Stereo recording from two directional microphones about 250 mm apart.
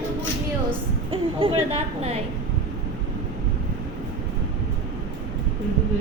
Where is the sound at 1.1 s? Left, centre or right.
Right.